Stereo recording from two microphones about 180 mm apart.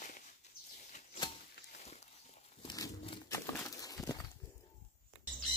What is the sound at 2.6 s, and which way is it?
Crumpling, 25° left (ahead or behind).